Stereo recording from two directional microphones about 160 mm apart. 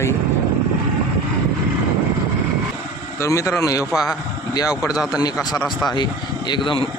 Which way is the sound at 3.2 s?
20° left (ahead or behind).